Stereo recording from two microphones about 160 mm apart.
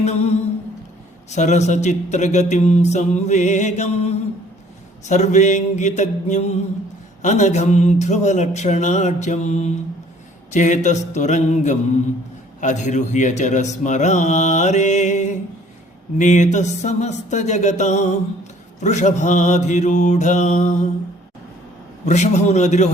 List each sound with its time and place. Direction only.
0.0 s speech: 45° left (ahead or behind)
22.0 s speech: 45° left (ahead or behind)